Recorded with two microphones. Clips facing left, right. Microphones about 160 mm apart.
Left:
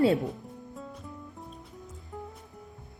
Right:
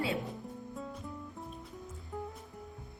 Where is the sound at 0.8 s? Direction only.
Centre (ahead or behind).